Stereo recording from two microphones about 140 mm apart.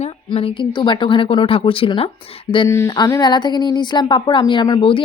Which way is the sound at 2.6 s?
20° left (ahead or behind).